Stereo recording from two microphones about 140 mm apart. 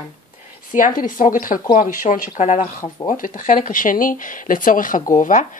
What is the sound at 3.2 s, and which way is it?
Speech, 75° left (ahead or behind).